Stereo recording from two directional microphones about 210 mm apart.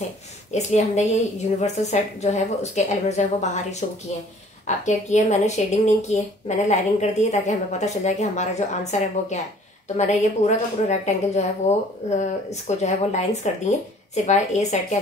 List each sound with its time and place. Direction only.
0.5 s a woman's voice: 35° left (ahead or behind)